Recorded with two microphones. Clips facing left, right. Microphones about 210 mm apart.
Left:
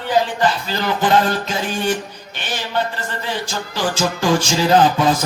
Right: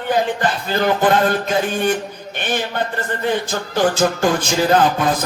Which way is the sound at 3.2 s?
55° right (ahead or behind).